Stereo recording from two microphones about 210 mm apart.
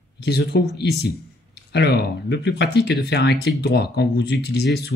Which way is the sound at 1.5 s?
50° left (ahead or behind).